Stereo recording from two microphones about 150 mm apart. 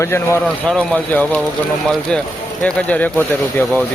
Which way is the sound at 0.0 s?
15° left (ahead or behind).